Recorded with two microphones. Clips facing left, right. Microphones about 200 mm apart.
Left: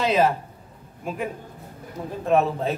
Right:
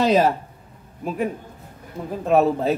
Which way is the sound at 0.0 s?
35° right (ahead or behind).